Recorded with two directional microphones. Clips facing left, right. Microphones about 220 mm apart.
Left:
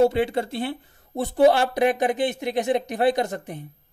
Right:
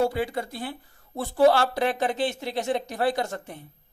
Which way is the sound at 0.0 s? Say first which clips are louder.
Left 6 dB; 25° left (ahead or behind).